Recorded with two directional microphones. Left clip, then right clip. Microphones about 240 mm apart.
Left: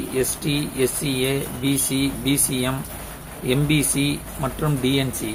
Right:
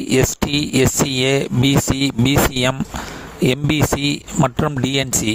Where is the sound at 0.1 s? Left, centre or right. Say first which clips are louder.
Right 7 dB; right.